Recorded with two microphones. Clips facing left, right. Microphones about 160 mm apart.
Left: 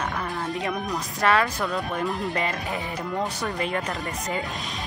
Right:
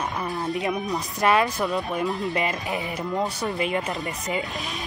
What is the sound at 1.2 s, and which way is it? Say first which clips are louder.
Speech: right 1 dB; 20° right (ahead or behind).